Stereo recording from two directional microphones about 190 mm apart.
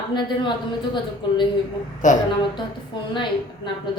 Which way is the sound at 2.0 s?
40° left (ahead or behind).